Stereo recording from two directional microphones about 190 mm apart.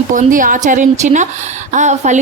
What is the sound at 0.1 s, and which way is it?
A woman's voice, 45° right (ahead or behind).